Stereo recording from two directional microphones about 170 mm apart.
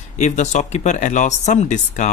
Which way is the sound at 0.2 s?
45° left (ahead or behind).